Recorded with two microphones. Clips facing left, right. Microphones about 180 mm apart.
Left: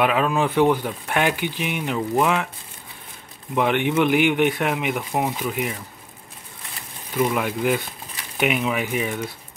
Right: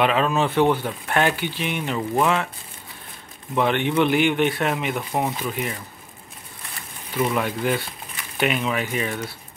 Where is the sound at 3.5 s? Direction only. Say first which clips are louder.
Left 1 dB; 10° left (ahead or behind).